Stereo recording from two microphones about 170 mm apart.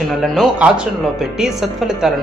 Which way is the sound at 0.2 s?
Centre (ahead or behind).